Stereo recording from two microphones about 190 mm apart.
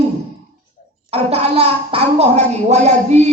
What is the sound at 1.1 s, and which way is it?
A child's voice, 35° right (ahead or behind).